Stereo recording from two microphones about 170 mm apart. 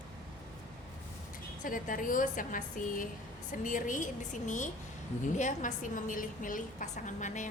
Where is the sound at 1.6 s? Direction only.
50° left (ahead or behind).